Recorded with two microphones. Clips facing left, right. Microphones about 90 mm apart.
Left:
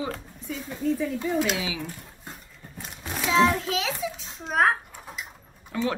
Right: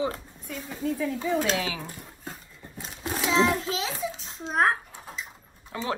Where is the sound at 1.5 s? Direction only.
50° right (ahead or behind).